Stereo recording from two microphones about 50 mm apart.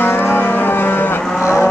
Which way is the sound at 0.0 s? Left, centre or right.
Left.